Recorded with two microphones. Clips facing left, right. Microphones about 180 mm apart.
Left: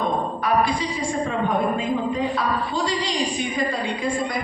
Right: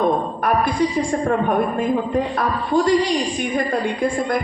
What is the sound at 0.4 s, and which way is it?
Music, 55° right (ahead or behind).